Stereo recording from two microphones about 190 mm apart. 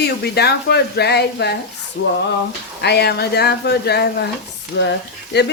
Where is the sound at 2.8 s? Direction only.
60° left (ahead or behind).